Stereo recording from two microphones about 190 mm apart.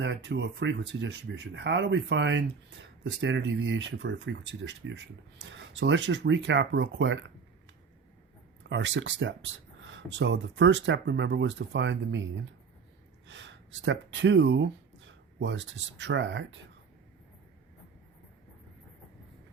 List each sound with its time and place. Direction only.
0.0 s speech: 70° right (ahead or behind)
8.7 s speech: 70° right (ahead or behind)